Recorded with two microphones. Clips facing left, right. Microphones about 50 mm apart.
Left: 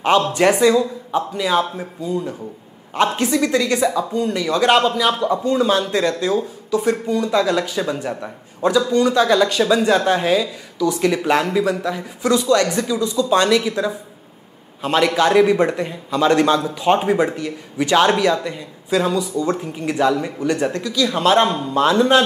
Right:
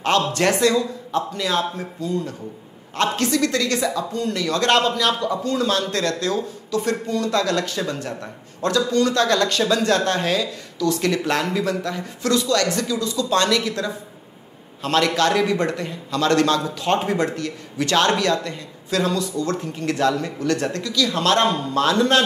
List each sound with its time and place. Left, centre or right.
0.0 s speech: centre
21.8 s music: centre